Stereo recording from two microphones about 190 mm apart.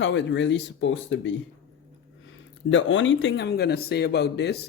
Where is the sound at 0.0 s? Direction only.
70° left (ahead or behind).